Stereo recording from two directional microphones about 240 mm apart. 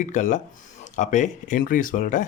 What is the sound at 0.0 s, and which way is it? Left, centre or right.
Speech, left.